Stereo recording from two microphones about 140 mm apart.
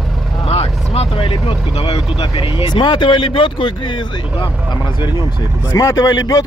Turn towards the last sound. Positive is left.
turn(degrees=25)  # may be behind; listen again after turning